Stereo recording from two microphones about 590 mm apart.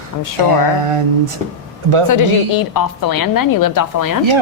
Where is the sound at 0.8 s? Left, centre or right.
Right.